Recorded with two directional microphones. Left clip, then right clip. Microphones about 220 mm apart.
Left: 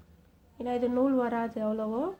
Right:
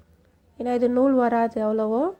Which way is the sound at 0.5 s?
30° right (ahead or behind).